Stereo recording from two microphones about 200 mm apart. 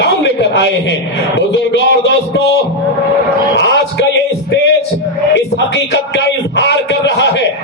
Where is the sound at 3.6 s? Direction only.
60° left (ahead or behind).